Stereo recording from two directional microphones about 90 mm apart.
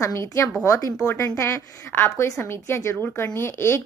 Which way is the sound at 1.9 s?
25° left (ahead or behind).